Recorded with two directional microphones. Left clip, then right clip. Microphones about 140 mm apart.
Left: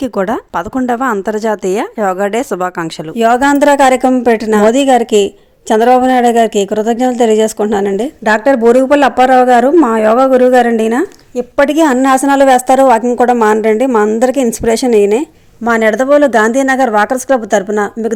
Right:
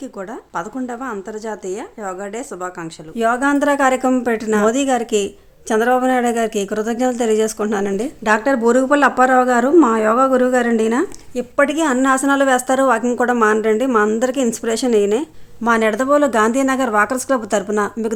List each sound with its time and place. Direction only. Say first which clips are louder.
0.0 s speech: left 15 dB; 65° left (ahead or behind)
3.2 s a woman's voice: left 7 dB; 40° left (ahead or behind); by 11.4 s 20° left (ahead or behind)
11.5 s speech: left 7 dB; 35° left (ahead or behind)
12.0 s a woman's voice: left 6 dB; 25° left (ahead or behind)